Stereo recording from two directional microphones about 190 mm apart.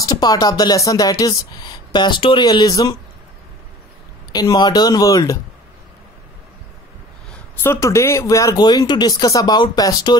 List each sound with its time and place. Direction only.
0.0 s speech: 20° left (ahead or behind)
4.3 s speech: 20° left (ahead or behind)
7.2 s speech: 10° left (ahead or behind)